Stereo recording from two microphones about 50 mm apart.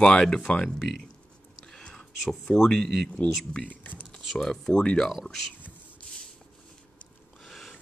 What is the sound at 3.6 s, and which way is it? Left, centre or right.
Speech, left.